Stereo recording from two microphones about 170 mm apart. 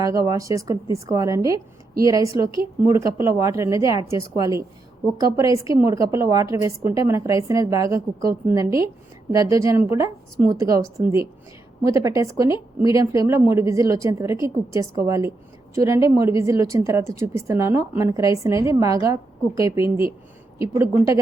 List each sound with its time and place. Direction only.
0.0 s a woman's voice: 20° right (ahead or behind)